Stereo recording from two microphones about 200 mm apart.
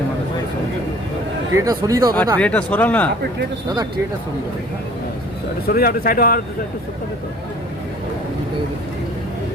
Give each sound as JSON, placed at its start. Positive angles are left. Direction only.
{"t": 1.5, "sound": "a man's voice", "side_deg": -15}
{"t": 2.4, "sound": "speech", "side_deg": 5}
{"t": 5.6, "sound": "speech", "side_deg": 50}